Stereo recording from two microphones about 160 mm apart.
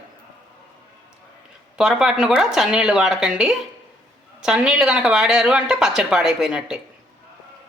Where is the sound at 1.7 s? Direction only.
5° right (ahead or behind).